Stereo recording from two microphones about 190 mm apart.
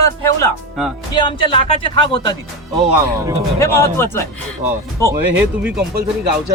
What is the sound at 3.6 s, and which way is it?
Speech, 15° left (ahead or behind).